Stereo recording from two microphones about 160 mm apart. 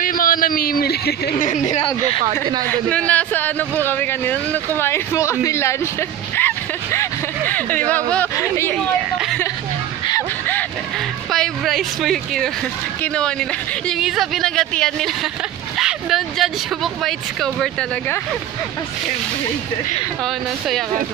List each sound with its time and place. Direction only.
0.0 s a man's voice: 60° left (ahead or behind); by 1.3 s 80° left
1.4 s speech: 45° left (ahead or behind)
2.6 s speech: 10° left (ahead or behind)
8.7 s speech: centre (ahead or behind)
11.3 s a woman's voice: centre (ahead or behind)